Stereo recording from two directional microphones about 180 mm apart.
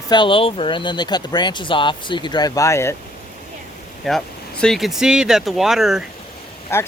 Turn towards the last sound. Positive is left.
turn(degrees=15)  # may be behind; listen again after turning